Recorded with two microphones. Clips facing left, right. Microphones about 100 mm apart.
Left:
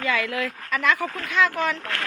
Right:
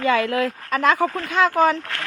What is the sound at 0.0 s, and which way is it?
Speech, 35° right (ahead or behind).